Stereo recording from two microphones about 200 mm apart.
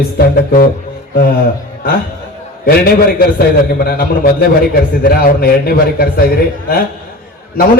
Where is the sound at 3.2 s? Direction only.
50° left (ahead or behind).